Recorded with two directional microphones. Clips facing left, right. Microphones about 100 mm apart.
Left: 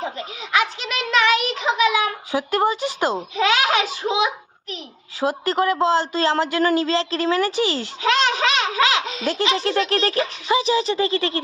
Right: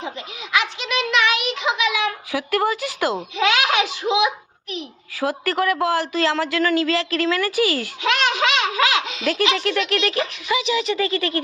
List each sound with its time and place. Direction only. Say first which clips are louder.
0.5 s child singing: even; 40° left (ahead or behind)
2.5 s a child's voice: even; 25° left (ahead or behind)
3.3 s a sound: even; 35° left (ahead or behind)
5.2 s a child's voice: left 1 dB; 20° left (ahead or behind)
9.0 s a sound: even; 30° left (ahead or behind)
9.3 s speech: even; 30° left (ahead or behind)